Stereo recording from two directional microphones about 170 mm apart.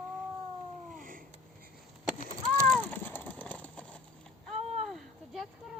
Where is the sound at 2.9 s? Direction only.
10° left (ahead or behind).